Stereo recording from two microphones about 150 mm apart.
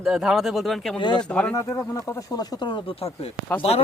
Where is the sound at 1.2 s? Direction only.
5° left (ahead or behind).